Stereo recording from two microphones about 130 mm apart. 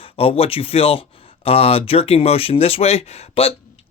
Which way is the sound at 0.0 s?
45° left (ahead or behind).